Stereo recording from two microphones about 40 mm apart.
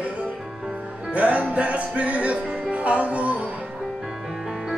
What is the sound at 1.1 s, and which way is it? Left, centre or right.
Music, right.